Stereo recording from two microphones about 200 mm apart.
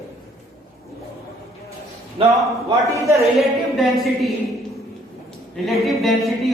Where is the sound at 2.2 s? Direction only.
25° right (ahead or behind).